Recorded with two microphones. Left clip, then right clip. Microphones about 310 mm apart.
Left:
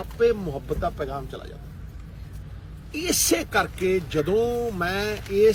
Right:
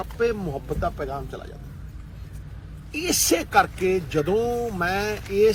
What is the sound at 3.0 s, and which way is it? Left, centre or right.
Speech, centre.